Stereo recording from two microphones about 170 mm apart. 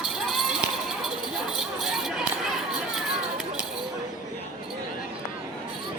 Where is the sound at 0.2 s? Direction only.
Centre (ahead or behind).